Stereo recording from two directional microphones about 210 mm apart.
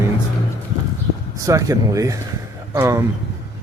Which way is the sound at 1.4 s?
15° right (ahead or behind).